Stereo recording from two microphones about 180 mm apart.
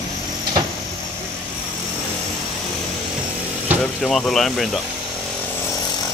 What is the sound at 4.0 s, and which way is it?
Speech, 5° left (ahead or behind).